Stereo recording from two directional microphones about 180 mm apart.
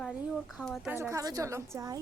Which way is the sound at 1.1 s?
20° right (ahead or behind).